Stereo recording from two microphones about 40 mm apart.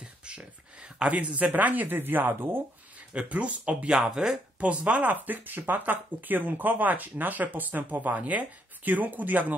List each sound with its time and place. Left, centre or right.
1.1 s speech: right
3.1 s speech: right
3.9 s speech: centre
4.6 s speech: right